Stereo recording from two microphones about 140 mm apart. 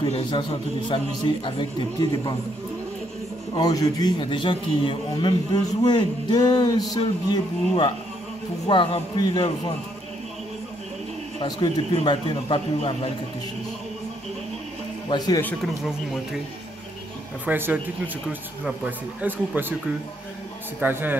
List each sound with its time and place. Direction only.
0.0 s a man's voice: 35° left (ahead or behind)
3.5 s a man's voice: 25° left (ahead or behind)
12.0 s a man's voice: 40° left (ahead or behind)
15.0 s a man's voice: 30° left (ahead or behind)
15.4 s speech: centre (ahead or behind)
17.5 s speech: 15° right (ahead or behind)
20.8 s speech: 15° right (ahead or behind)